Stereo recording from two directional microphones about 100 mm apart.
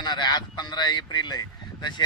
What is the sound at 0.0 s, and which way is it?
Speech, 45° left (ahead or behind).